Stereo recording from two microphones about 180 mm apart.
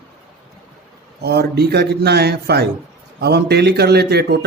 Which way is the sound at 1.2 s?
65° right (ahead or behind).